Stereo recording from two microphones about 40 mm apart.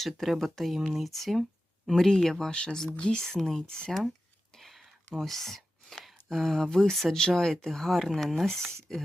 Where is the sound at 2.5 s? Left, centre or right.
Left.